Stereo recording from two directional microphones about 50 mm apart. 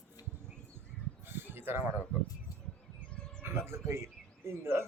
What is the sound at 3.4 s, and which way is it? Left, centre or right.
Speech, right.